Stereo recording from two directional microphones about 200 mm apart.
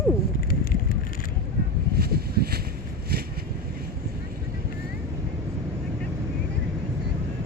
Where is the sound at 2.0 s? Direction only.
50° right (ahead or behind).